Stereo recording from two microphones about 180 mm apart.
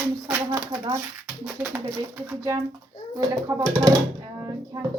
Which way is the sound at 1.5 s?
15° right (ahead or behind).